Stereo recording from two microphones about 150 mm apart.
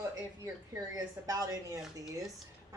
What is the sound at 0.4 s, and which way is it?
A woman's voice, 20° right (ahead or behind).